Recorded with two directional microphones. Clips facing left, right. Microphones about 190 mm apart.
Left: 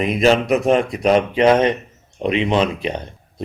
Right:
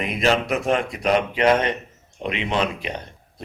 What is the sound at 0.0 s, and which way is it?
A man's voice, 20° left (ahead or behind).